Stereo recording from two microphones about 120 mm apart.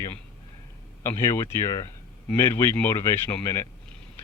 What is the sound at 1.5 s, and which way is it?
Speech, 35° left (ahead or behind).